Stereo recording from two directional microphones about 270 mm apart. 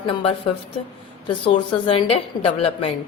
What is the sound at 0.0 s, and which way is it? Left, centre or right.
Speech, centre.